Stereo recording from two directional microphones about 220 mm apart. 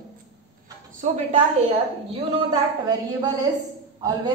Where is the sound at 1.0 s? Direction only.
30° right (ahead or behind).